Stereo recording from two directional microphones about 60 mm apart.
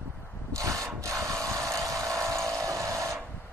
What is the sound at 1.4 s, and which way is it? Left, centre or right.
Vehicle, right.